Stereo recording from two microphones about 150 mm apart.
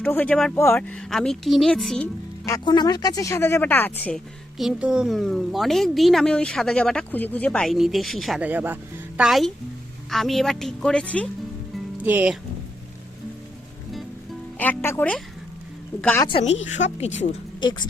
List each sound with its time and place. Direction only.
0.0 s speech: 10° left (ahead or behind)
2.5 s speech: 25° left (ahead or behind)
4.0 s speech: centre (ahead or behind)
8.4 s speech: 10° right (ahead or behind); by 11.3 s 10° left (ahead or behind)
11.9 s speech: 10° right (ahead or behind)
14.6 s speech: 15° left (ahead or behind)
16.4 s speech: 45° left (ahead or behind)
17.6 s speech: 30° left (ahead or behind)